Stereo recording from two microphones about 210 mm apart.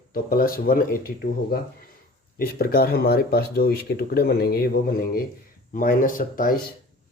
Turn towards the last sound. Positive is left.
turn(degrees=40)  # may be behind; listen again after turning